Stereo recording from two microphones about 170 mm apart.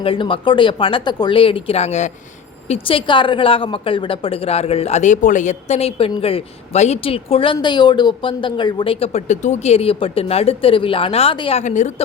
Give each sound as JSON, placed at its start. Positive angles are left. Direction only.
{"t": 0.0, "sound": "a woman's voice", "side_deg": 30}